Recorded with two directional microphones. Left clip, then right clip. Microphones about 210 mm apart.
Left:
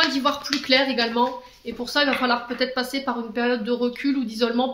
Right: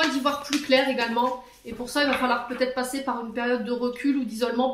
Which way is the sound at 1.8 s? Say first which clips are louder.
Left 2 dB; 45° left (ahead or behind).